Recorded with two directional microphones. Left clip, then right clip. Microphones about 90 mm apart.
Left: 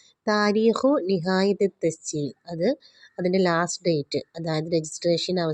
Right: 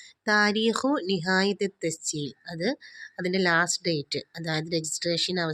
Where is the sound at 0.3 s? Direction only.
30° left (ahead or behind).